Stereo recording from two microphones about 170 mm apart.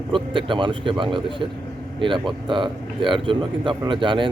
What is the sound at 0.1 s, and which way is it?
Speech, 30° right (ahead or behind).